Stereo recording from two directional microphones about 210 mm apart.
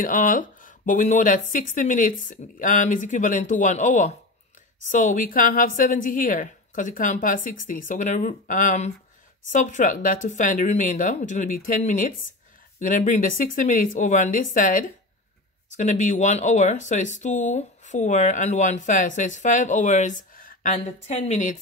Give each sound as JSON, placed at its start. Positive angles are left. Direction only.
{"t": 0.0, "sound": "speech", "side_deg": 40}